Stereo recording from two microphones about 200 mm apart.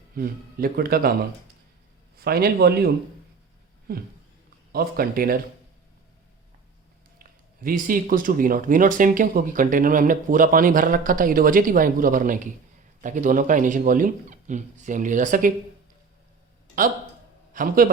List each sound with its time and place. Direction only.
0.1 s speech: 45° right (ahead or behind)
2.1 s speech: 50° right (ahead or behind)
4.7 s speech: 45° right (ahead or behind)
7.2 s speech: 45° right (ahead or behind)
17.5 s a man's voice: 45° right (ahead or behind)